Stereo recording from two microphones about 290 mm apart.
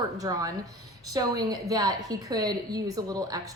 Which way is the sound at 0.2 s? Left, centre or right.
Centre.